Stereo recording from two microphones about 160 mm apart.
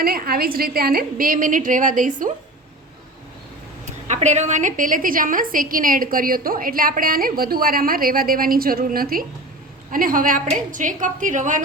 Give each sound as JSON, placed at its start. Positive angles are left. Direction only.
{"t": 0.0, "sound": "a woman's voice", "side_deg": -70}
{"t": 4.1, "sound": "a woman's voice", "side_deg": -45}